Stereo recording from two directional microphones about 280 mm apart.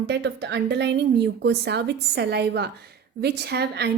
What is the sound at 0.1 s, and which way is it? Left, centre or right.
A woman's voice, right.